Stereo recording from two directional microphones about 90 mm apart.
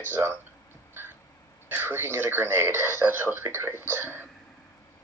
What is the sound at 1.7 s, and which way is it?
Speech, 25° right (ahead or behind).